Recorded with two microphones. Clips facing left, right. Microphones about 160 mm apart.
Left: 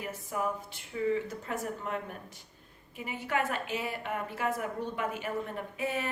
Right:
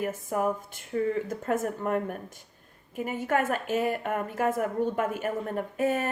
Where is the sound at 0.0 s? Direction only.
50° right (ahead or behind).